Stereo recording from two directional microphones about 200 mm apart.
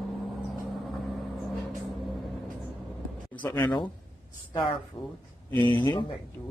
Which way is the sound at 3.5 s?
20° left (ahead or behind).